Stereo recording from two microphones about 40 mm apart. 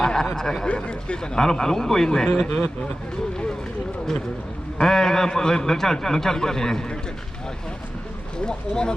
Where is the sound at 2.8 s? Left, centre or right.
Left.